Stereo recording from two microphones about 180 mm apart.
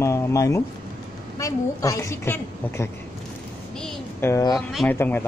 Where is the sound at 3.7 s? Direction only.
5° left (ahead or behind).